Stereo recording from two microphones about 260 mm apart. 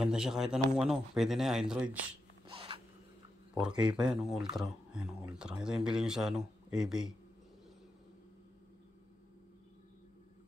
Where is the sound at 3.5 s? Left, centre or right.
Centre.